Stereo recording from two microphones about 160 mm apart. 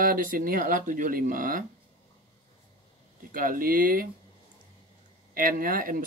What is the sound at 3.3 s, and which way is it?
Speech, 60° right (ahead or behind).